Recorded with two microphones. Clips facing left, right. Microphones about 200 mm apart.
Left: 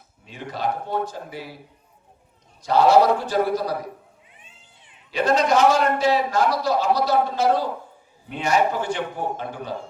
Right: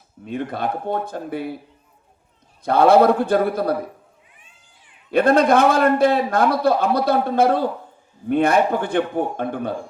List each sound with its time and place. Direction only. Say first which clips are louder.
0.3 s a man's voice: right 3 dB; 55° right (ahead or behind)
2.6 s a man's voice: right 3 dB; 55° right (ahead or behind)
4.4 s cat: left 2 dB; 25° left (ahead or behind)
5.1 s a man's voice: right 5 dB; 55° right (ahead or behind)